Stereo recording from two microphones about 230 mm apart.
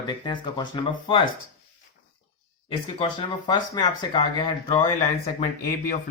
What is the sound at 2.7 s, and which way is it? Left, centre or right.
Speech, left.